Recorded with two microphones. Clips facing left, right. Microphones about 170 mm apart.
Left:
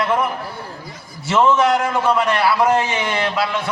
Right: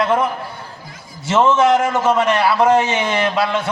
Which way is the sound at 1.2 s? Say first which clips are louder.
Right 2 dB; 25° right (ahead or behind).